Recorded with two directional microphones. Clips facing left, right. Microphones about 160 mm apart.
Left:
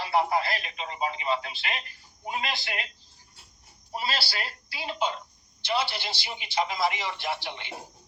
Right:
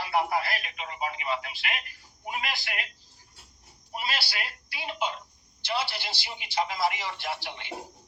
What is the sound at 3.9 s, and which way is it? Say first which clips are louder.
A woman's voice: left 2 dB; 30° left (ahead or behind).